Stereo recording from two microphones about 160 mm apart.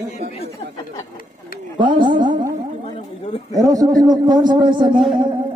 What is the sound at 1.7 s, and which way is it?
Speech, 30° right (ahead or behind).